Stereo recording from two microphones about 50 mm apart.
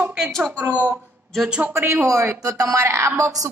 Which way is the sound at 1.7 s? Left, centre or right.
Right.